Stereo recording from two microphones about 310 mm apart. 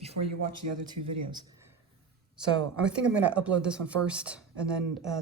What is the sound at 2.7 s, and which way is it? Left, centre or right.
Speech, centre.